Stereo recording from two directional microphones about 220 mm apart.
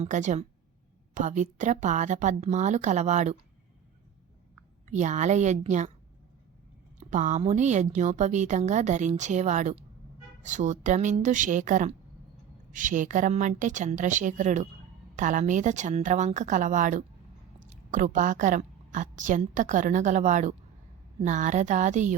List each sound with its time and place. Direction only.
0.0 s a woman's voice: 35° right (ahead or behind)
4.9 s a woman's voice: 35° right (ahead or behind)
7.1 s a woman's voice: 35° right (ahead or behind)